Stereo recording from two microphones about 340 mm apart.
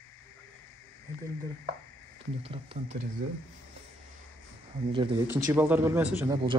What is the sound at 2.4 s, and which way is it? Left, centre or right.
Speech, centre.